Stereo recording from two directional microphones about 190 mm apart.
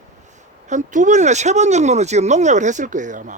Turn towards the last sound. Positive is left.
turn(degrees=-40)  # may be behind; listen again after turning